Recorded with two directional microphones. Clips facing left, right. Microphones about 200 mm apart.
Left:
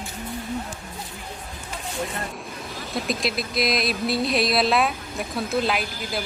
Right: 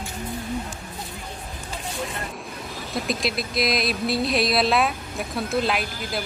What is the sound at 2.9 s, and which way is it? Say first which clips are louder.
Music: even; centre (ahead or behind).